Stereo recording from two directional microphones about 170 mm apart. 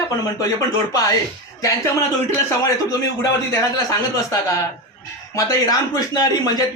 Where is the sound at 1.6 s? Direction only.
20° left (ahead or behind).